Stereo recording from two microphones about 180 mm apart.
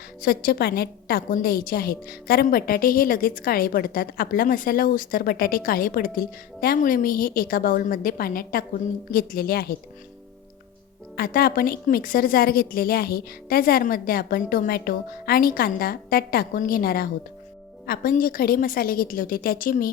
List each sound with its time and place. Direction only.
0.2 s a woman's voice: 55° left (ahead or behind)
11.2 s a woman's voice: 55° left (ahead or behind)